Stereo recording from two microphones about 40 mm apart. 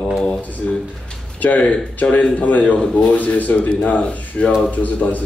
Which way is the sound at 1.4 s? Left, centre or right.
Left.